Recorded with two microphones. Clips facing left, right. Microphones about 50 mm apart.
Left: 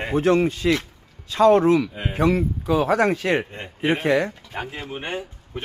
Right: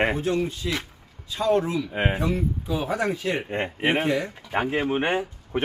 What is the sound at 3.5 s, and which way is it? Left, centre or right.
Speech, right.